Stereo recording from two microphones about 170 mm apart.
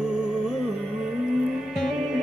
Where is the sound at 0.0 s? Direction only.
5° right (ahead or behind).